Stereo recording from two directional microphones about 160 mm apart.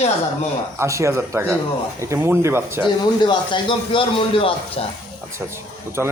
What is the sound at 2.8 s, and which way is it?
A man's voice, 30° left (ahead or behind).